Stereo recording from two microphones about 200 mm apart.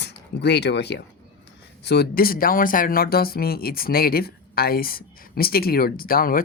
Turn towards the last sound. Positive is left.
turn(degrees=45)  # may be behind; listen again after turning